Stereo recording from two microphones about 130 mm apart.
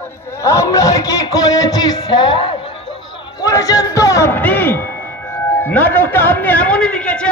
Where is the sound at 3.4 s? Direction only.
25° left (ahead or behind); by 7.3 s 10° left (ahead or behind).